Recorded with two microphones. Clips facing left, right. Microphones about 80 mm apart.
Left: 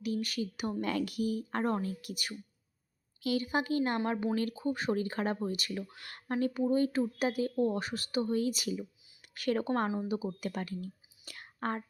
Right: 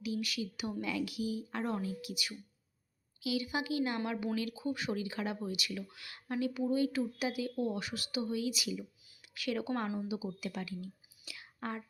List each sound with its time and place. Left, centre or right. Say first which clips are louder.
0.0 s speech: left 3 dB; left
11.3 s whispering: left 5 dB; left